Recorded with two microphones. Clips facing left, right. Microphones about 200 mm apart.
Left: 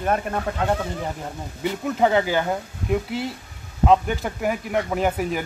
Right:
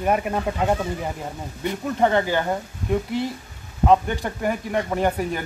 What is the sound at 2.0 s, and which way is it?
Speech, 5° left (ahead or behind).